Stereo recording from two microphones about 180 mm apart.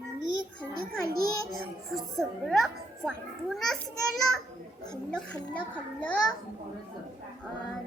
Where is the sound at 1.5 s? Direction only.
Centre (ahead or behind).